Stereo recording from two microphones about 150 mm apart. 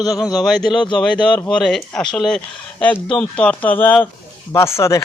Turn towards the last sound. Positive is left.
turn(degrees=20)  # may be behind; listen again after turning